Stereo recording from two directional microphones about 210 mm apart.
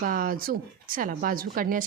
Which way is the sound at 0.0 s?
40° right (ahead or behind).